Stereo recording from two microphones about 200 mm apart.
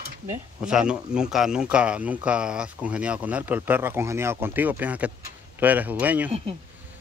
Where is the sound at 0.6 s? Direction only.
5° right (ahead or behind).